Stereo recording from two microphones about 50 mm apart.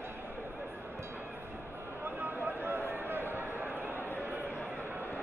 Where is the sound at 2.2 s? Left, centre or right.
Right.